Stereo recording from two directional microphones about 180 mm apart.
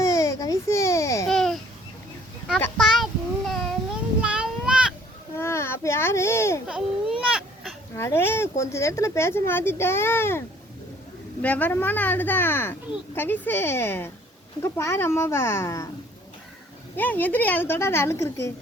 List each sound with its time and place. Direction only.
0.0 s baby cry: 15° left (ahead or behind)
1.3 s babbling: 5° left (ahead or behind)
2.6 s a sound: 10° left (ahead or behind)
2.8 s child singing: centre (ahead or behind)
4.2 s a sound: 5° right (ahead or behind)
5.4 s baby cry: 15° left (ahead or behind)
6.7 s baby cry: 5° right (ahead or behind)
7.9 s speech: 15° left (ahead or behind)
11.4 s speech: 10° left (ahead or behind)
17.0 s speech: 10° left (ahead or behind)